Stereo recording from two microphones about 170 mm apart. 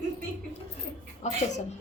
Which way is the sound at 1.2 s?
45° left (ahead or behind).